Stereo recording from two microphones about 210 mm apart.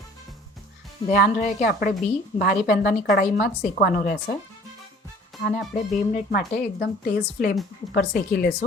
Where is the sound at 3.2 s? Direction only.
45° left (ahead or behind).